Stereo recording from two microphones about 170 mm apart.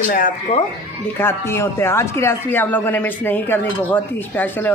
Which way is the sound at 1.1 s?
15° left (ahead or behind).